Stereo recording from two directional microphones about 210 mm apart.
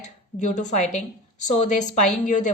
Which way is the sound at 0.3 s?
35° left (ahead or behind).